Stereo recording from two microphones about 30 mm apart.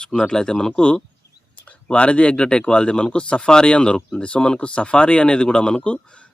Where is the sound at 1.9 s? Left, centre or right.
Left.